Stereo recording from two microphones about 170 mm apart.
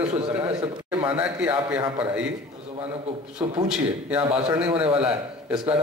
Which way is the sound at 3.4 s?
10° right (ahead or behind).